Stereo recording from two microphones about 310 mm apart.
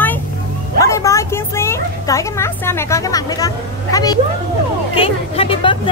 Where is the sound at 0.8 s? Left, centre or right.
Centre.